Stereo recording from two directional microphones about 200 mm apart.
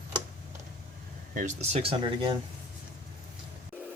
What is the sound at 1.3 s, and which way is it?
Speech, 35° right (ahead or behind).